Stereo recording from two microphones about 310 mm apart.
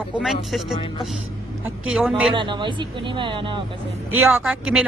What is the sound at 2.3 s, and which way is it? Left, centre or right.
A woman's voice, centre.